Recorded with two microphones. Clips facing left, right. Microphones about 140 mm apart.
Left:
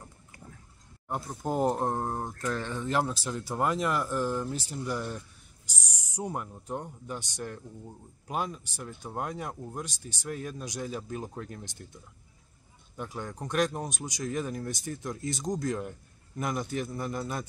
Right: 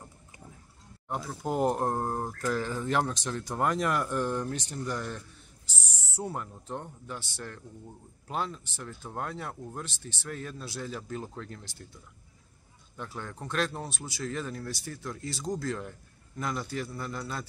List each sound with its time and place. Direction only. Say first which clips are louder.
1.4 s speech: even; centre (ahead or behind); by 17.5 s 20° left (ahead or behind)